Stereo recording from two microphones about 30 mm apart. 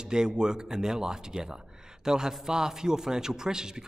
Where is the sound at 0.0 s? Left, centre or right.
Right.